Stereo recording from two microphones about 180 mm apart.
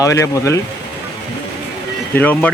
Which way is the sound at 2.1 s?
10° left (ahead or behind).